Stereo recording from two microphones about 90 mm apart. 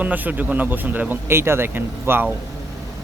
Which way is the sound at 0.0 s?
20° right (ahead or behind).